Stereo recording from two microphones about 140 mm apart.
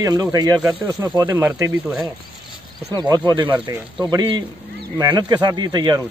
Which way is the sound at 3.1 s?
30° right (ahead or behind).